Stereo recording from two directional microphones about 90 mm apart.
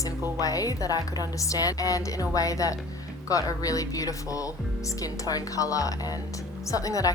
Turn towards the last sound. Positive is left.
turn(degrees=40)  # may be behind; listen again after turning